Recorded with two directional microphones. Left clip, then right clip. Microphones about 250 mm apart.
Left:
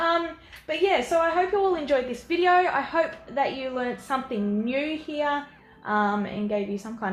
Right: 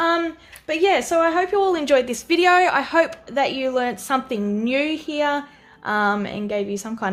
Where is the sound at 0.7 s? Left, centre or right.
Right.